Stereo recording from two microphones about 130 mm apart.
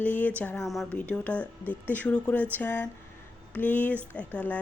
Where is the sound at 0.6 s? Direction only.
Centre (ahead or behind).